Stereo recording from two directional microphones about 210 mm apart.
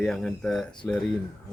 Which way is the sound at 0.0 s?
5° left (ahead or behind).